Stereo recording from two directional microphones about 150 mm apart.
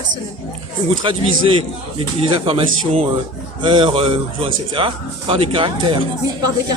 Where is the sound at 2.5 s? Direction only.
35° right (ahead or behind).